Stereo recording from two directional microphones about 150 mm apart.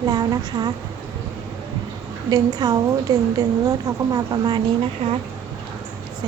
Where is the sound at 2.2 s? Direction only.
25° right (ahead or behind).